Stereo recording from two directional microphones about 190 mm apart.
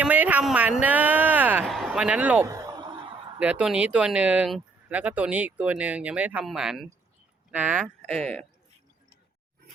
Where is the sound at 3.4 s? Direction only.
5° right (ahead or behind).